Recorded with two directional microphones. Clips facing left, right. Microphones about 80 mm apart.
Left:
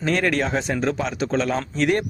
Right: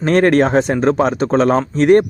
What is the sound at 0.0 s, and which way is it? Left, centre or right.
Speech, right.